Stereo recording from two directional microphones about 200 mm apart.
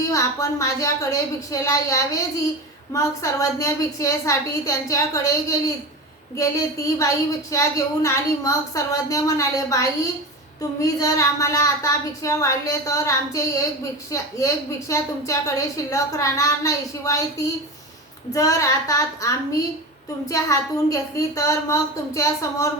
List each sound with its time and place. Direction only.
0.1 s a woman's voice: 15° left (ahead or behind)